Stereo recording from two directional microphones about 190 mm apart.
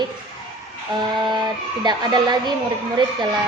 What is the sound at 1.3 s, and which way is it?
A woman's voice, 25° right (ahead or behind).